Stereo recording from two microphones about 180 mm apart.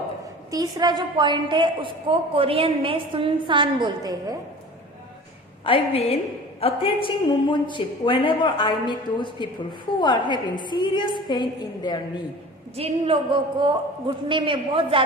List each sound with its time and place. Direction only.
0.5 s a woman's voice: 20° right (ahead or behind)
5.6 s a woman's voice: 30° left (ahead or behind)
12.7 s a woman's voice: 30° right (ahead or behind)